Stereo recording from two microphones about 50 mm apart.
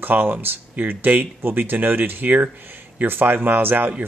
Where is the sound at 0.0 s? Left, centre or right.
Right.